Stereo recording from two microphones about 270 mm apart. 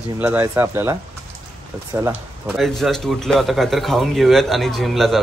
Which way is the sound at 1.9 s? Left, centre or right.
Centre.